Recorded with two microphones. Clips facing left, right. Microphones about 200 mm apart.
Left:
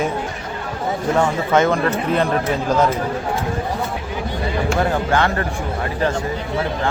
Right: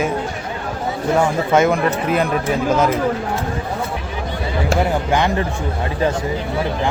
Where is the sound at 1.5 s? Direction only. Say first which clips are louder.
Right 1 dB; 10° right (ahead or behind).